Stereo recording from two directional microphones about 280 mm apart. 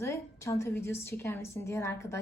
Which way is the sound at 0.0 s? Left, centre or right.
Centre.